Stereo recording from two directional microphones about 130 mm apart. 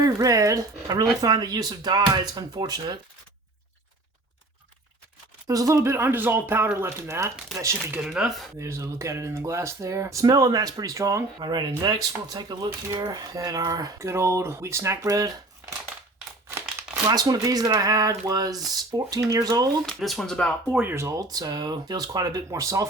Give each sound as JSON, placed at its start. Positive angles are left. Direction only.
{"t": 0.0, "sound": "speech", "side_deg": -25}
{"t": 5.5, "sound": "speech", "side_deg": -25}
{"t": 8.0, "sound": "speech", "side_deg": -5}
{"t": 8.5, "sound": "speech", "side_deg": -25}
{"t": 11.3, "sound": "speech", "side_deg": -35}
{"t": 16.6, "sound": "crumpling", "side_deg": -20}
{"t": 17.1, "sound": "speech", "side_deg": -30}
{"t": 19.8, "sound": "speech", "side_deg": 0}
{"t": 20.7, "sound": "speech", "side_deg": -15}